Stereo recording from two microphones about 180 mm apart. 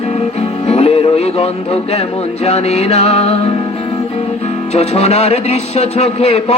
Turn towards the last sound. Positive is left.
turn(degrees=35)  # may be behind; listen again after turning